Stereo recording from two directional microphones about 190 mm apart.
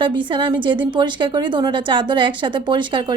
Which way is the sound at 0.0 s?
25° right (ahead or behind).